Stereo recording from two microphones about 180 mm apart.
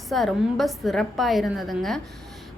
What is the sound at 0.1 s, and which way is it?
A woman's voice, centre (ahead or behind).